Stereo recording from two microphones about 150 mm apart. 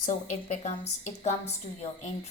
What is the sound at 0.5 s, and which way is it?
A woman's voice, 50° left (ahead or behind).